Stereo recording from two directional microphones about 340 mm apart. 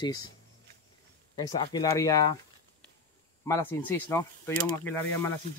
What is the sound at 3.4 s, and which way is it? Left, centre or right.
Speech, centre.